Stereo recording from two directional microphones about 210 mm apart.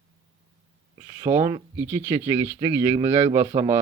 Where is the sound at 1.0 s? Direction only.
15° right (ahead or behind).